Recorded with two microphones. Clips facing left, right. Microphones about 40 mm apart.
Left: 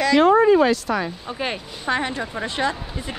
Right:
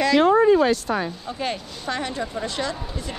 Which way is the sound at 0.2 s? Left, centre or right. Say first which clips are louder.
Left 2 dB; left.